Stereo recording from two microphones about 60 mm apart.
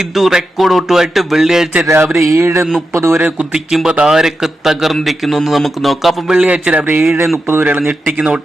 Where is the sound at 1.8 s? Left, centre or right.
Right.